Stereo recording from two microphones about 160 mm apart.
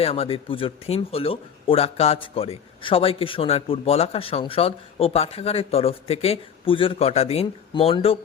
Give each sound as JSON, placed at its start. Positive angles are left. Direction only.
{"t": 0.0, "sound": "speech", "side_deg": 40}